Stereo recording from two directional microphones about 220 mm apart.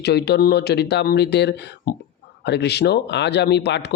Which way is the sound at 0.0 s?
50° left (ahead or behind).